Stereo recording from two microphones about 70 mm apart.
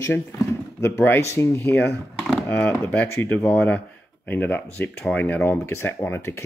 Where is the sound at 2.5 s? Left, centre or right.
Left.